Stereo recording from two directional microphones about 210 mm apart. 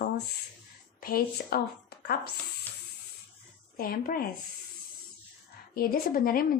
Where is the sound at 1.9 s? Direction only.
50° left (ahead or behind).